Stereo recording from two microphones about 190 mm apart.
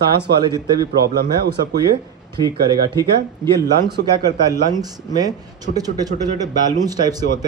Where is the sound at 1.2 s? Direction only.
55° right (ahead or behind).